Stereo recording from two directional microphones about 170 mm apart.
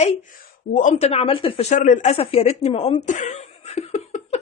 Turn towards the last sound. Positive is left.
turn(degrees=40)  # may be behind; listen again after turning